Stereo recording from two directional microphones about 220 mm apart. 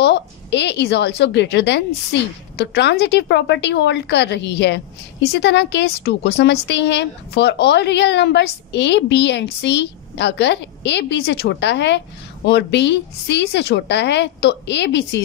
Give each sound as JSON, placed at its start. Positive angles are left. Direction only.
{"t": 0.0, "sound": "speech", "side_deg": 50}